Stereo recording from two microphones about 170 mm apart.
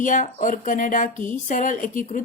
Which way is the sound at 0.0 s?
50° left (ahead or behind).